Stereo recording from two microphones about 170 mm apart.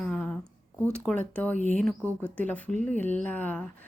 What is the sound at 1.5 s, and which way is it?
Speech, 45° right (ahead or behind).